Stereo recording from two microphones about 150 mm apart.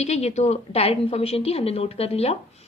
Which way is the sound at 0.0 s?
45° left (ahead or behind).